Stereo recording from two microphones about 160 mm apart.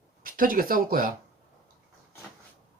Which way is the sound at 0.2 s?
60° right (ahead or behind).